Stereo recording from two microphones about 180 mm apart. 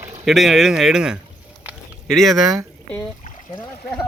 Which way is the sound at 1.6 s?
5° right (ahead or behind).